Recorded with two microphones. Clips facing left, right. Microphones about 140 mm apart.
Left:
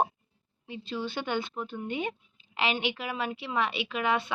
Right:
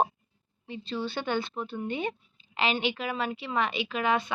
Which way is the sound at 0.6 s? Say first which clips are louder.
Right 1 dB; 10° left (ahead or behind).